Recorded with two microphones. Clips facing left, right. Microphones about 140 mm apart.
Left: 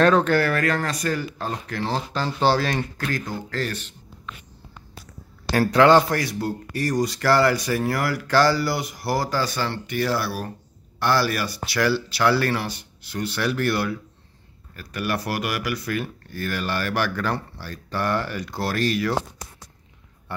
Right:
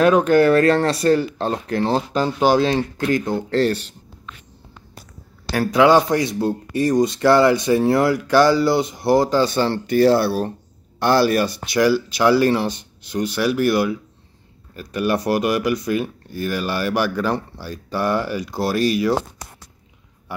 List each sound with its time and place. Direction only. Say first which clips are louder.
0.0 s speech: right 4 dB; 15° right (ahead or behind); by 3.9 s 30° right (ahead or behind)
5.5 s speech: right 1 dB; 15° right (ahead or behind)
20.3 s speech: right 2 dB; 10° right (ahead or behind)